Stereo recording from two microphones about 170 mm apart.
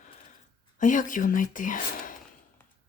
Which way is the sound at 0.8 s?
50° left (ahead or behind).